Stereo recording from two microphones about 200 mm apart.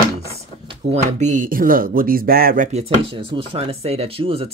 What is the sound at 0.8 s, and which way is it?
Speech, 30° right (ahead or behind).